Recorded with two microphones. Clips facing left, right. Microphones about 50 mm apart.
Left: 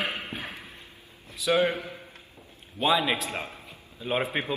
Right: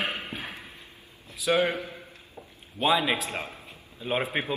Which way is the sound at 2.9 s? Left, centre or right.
Centre.